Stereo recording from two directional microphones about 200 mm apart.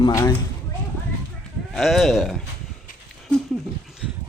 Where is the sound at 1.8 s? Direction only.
Centre (ahead or behind).